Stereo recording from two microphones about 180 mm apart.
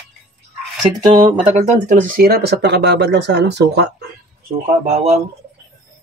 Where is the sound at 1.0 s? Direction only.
25° right (ahead or behind).